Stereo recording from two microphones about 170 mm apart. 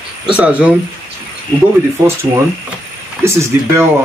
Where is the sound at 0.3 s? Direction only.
5° right (ahead or behind).